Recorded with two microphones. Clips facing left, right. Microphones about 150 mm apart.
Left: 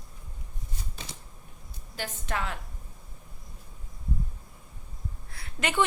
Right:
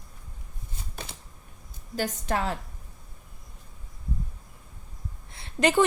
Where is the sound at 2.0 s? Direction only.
40° right (ahead or behind).